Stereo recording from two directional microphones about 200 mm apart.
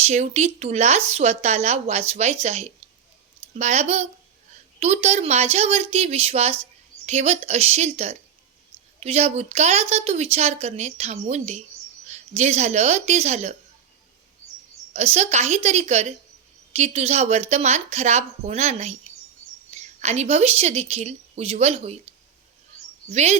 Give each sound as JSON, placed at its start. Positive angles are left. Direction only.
{"t": 0.0, "sound": "speech", "side_deg": -35}
{"t": 14.9, "sound": "speech", "side_deg": -35}
{"t": 20.0, "sound": "speech", "side_deg": -35}
{"t": 23.1, "sound": "speech", "side_deg": -35}